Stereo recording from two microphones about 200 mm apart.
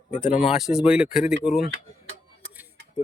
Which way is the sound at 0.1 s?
40° left (ahead or behind).